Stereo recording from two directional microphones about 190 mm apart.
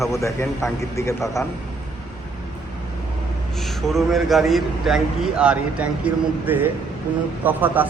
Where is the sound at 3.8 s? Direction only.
Centre (ahead or behind).